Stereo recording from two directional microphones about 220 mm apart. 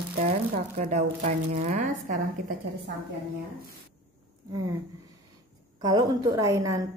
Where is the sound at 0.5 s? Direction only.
30° right (ahead or behind).